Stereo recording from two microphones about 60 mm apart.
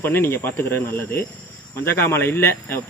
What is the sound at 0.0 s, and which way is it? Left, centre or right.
A man's voice, left.